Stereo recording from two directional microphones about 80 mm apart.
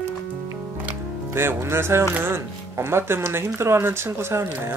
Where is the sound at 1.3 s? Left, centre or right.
Right.